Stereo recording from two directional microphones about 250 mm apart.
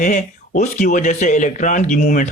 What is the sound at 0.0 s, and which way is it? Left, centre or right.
Speech, left.